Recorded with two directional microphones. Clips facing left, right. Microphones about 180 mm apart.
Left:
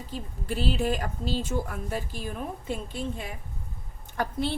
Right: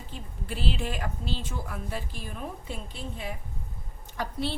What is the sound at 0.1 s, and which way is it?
A woman's voice, 40° left (ahead or behind).